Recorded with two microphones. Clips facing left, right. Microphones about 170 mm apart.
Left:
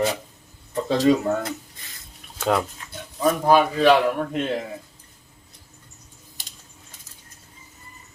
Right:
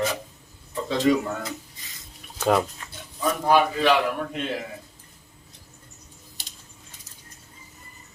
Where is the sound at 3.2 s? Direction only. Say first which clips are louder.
Left 3 dB; 40° left (ahead or behind).